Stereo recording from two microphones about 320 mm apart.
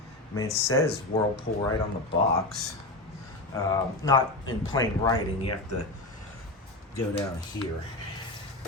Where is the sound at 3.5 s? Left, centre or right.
Centre.